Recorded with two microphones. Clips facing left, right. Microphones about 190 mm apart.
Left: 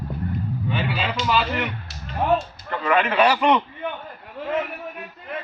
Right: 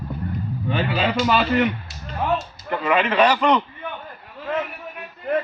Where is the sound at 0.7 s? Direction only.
50° right (ahead or behind).